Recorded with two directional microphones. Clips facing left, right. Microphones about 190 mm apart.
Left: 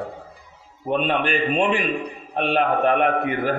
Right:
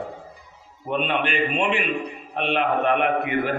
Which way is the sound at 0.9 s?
40° left (ahead or behind).